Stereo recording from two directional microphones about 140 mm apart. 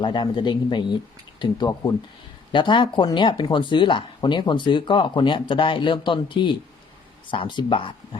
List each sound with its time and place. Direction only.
0.0 s speech: 35° left (ahead or behind)